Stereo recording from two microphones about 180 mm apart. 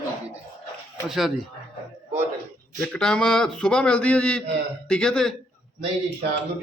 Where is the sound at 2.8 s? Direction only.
5° left (ahead or behind).